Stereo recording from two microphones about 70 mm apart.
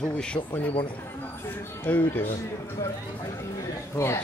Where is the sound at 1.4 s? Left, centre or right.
Left.